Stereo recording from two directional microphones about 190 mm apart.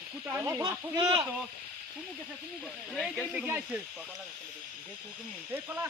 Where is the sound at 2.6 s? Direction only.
Centre (ahead or behind).